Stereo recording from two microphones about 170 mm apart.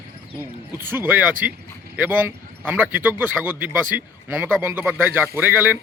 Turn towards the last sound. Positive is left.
turn(degrees=-10)  # may be behind; listen again after turning